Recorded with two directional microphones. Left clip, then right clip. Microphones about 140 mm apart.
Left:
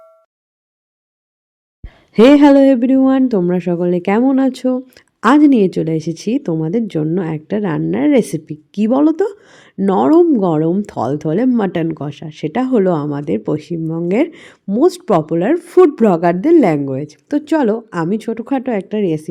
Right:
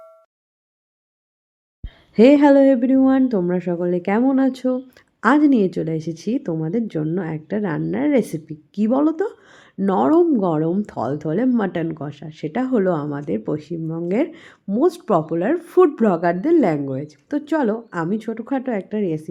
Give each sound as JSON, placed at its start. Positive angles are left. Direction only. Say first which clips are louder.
{"t": 1.8, "sound": "speech", "louder": "left 4 dB", "side_deg": 50}